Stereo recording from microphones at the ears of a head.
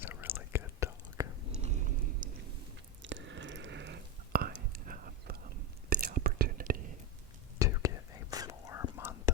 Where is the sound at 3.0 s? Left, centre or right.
Right.